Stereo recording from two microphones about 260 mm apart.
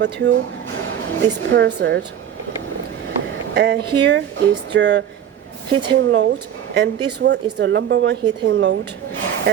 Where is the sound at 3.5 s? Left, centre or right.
Right.